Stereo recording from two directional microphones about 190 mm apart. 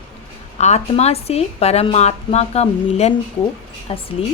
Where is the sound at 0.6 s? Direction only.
35° left (ahead or behind).